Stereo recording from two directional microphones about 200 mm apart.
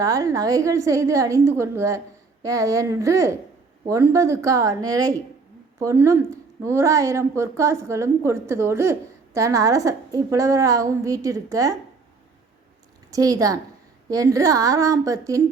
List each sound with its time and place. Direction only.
0.0 s a woman's voice: 15° right (ahead or behind)
13.1 s a woman's voice: 15° right (ahead or behind)